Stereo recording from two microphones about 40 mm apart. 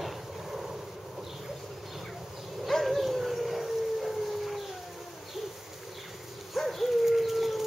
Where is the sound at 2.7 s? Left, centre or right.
Centre.